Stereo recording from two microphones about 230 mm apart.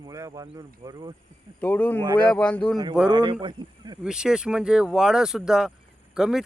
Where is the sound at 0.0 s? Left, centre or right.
Centre.